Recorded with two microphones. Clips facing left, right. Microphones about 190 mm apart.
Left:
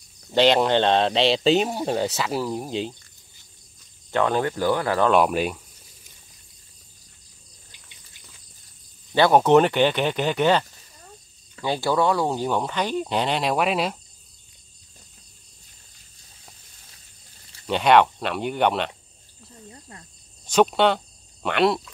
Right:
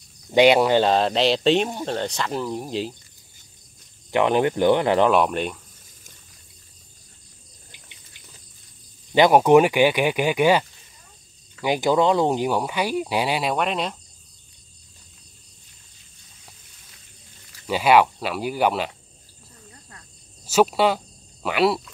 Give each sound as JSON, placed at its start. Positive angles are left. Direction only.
{"t": 0.3, "sound": "speech", "side_deg": -10}
{"t": 4.1, "sound": "speech", "side_deg": -15}
{"t": 5.1, "sound": "speech", "side_deg": 5}
{"t": 9.1, "sound": "speech", "side_deg": -15}
{"t": 11.6, "sound": "speech", "side_deg": -15}
{"t": 17.6, "sound": "speech", "side_deg": -5}
{"t": 19.7, "sound": "cricket", "side_deg": 25}
{"t": 20.4, "sound": "speech", "side_deg": -5}